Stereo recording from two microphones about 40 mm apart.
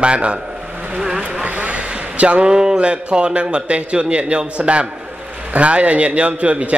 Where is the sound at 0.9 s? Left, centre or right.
Centre.